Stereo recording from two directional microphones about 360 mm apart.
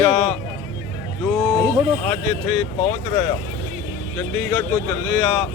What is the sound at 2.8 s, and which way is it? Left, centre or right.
Speech, centre.